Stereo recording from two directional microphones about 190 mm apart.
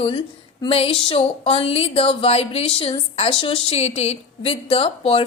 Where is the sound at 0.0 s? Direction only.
30° left (ahead or behind).